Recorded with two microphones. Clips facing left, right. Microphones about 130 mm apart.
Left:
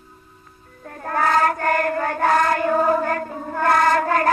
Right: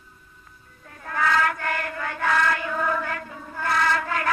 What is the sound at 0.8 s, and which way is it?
Chant, 50° left (ahead or behind).